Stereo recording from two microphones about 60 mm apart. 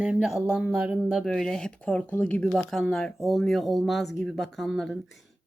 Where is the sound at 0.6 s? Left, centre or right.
Right.